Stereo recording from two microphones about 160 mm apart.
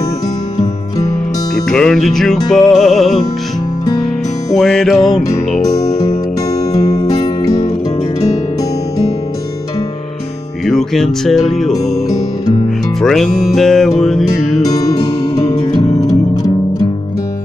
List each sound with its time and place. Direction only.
1.7 s music: 5° left (ahead or behind)
4.6 s music: centre (ahead or behind)
5.8 s music: 20° left (ahead or behind)
10.6 s music: centre (ahead or behind)
11.7 s music: 25° left (ahead or behind)
13.0 s music: centre (ahead or behind)
15.6 s music: 30° left (ahead or behind)